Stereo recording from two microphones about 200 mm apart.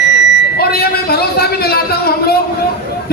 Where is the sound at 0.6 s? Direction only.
50° left (ahead or behind).